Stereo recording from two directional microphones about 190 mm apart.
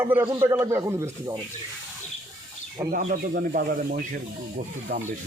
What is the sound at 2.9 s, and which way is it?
Speech, 50° right (ahead or behind).